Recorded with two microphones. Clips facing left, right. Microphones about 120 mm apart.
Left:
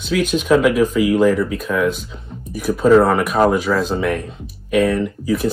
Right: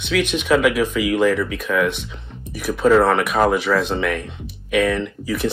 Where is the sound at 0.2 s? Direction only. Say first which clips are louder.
Left 3 dB; 40° left (ahead or behind).